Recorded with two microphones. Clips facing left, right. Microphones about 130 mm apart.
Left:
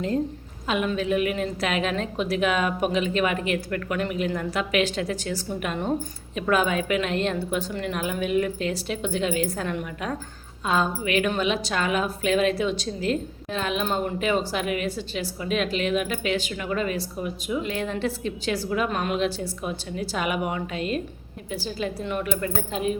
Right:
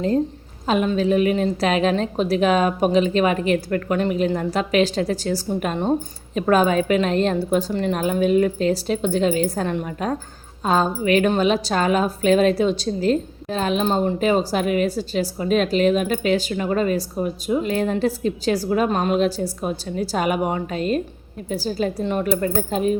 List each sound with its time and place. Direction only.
0.7 s a woman's voice: 35° right (ahead or behind)